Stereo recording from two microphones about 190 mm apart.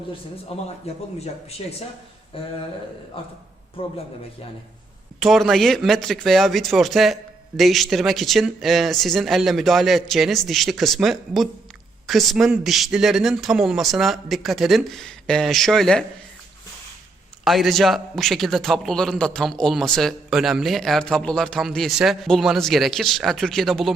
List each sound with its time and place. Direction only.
0.5 s a man's voice: 30° left (ahead or behind)
2.3 s a man's voice: 30° left (ahead or behind)
5.2 s a man's voice: centre (ahead or behind)
17.4 s a man's voice: centre (ahead or behind)